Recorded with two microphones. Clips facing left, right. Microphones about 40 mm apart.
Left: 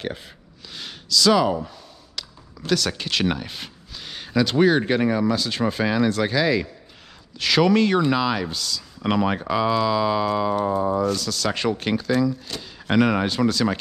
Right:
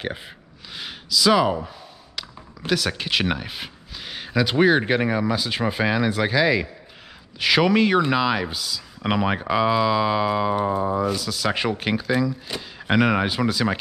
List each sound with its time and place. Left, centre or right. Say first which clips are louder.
0.7 s speech: left 1 dB; centre